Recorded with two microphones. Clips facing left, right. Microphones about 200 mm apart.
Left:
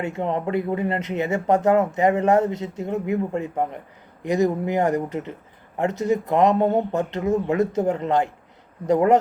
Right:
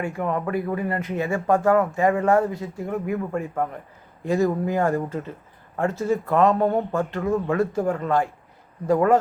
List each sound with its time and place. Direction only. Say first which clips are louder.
0.0 s speech: left 1 dB; 25° left (ahead or behind)